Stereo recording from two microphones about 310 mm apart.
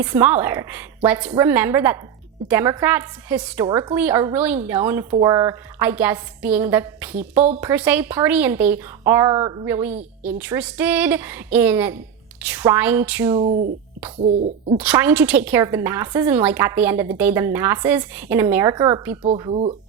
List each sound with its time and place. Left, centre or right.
0.0 s a woman's voice: centre
13.4 s hoot: right
14.8 s a woman's voice: centre
19.2 s hoot: centre